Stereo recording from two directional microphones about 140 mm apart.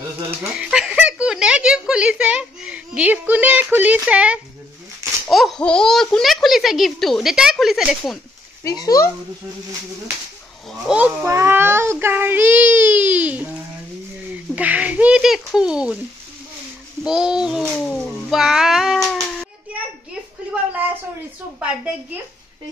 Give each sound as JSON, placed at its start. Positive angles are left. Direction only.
{"t": 0.6, "sound": "speech", "side_deg": -5}
{"t": 8.6, "sound": "speech", "side_deg": 25}
{"t": 10.7, "sound": "speech", "side_deg": -5}
{"t": 11.2, "sound": "speech", "side_deg": -15}
{"t": 14.5, "sound": "speech", "side_deg": -10}
{"t": 17.0, "sound": "speech", "side_deg": -5}
{"t": 21.5, "sound": "speech", "side_deg": -10}